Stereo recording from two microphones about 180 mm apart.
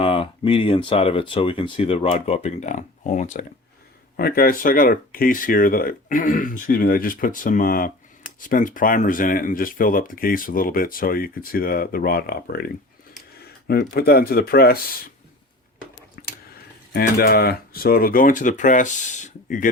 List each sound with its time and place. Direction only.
0.0 s speech: 30° left (ahead or behind)
4.2 s speech: 55° left (ahead or behind)
13.4 s a sound: 60° left (ahead or behind)
13.9 s speech: 60° left (ahead or behind)
16.2 s a sound: 50° left (ahead or behind)
16.9 s speech: 55° left (ahead or behind)